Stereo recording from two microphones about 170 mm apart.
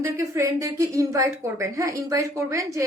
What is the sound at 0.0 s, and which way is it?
A woman's voice, 15° right (ahead or behind).